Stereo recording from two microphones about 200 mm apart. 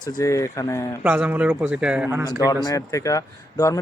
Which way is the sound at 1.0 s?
10° right (ahead or behind).